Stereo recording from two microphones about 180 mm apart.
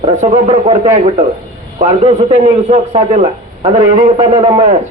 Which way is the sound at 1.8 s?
35° right (ahead or behind).